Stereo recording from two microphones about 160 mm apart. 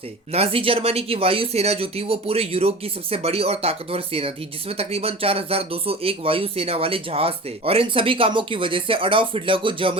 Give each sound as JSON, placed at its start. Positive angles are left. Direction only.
{"t": 0.3, "sound": "speech", "side_deg": -35}